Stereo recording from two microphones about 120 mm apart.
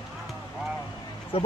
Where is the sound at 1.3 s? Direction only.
50° left (ahead or behind).